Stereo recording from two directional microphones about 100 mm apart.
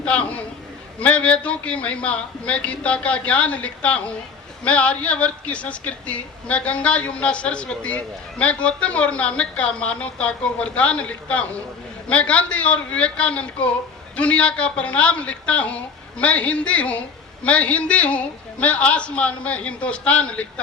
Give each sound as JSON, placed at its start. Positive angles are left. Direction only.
{"t": 0.0, "sound": "a man's voice", "side_deg": 10}